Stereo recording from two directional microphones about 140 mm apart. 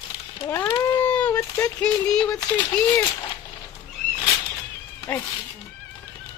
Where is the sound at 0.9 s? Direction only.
10° left (ahead or behind).